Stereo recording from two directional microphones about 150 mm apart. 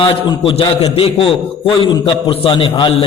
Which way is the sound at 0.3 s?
30° left (ahead or behind).